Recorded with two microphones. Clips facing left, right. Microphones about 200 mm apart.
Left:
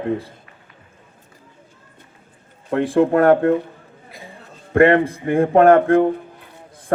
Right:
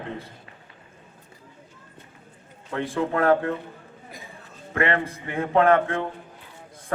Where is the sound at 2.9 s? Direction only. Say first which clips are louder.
Left 7 dB; 60° left (ahead or behind).